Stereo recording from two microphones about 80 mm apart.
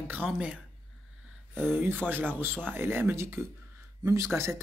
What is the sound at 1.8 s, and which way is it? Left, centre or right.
Speech, right.